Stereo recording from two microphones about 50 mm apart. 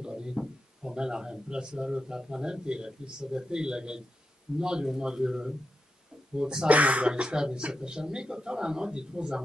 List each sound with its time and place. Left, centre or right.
0.0 s speech: centre
6.7 s speech: right